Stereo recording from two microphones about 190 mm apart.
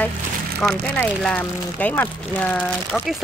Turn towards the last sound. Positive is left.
turn(degrees=5)  # may be behind; listen again after turning